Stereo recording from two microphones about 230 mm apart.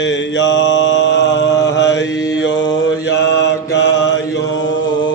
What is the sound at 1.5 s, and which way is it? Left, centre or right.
Mantra, centre.